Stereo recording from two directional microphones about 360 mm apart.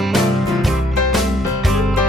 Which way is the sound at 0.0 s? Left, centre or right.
Centre.